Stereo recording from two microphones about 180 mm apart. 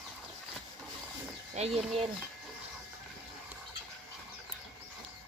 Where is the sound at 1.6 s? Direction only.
40° right (ahead or behind).